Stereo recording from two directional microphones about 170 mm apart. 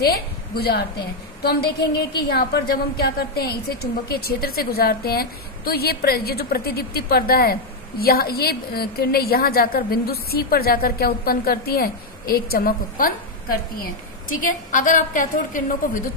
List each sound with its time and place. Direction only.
0.6 s a woman's voice: 70° left (ahead or behind)
14.3 s a woman's voice: 50° left (ahead or behind)